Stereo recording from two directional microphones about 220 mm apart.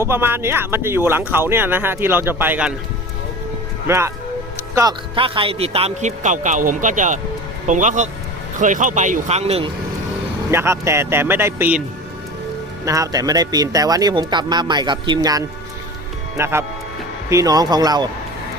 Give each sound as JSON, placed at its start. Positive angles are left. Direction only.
{"t": 0.0, "sound": "speech", "side_deg": -10}
{"t": 3.8, "sound": "a man's voice", "side_deg": -10}
{"t": 10.5, "sound": "speech", "side_deg": -10}
{"t": 12.8, "sound": "speech", "side_deg": -15}